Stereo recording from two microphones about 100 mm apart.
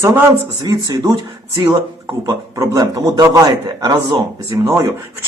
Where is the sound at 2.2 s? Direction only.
35° right (ahead or behind).